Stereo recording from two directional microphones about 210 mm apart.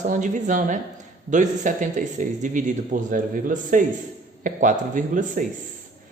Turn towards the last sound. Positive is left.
turn(degrees=-40)  # may be behind; listen again after turning